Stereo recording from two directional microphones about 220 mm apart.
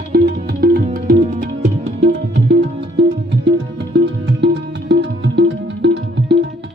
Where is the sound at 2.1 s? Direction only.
50° right (ahead or behind).